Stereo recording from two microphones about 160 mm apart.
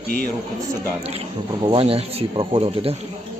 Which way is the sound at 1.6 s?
35° right (ahead or behind).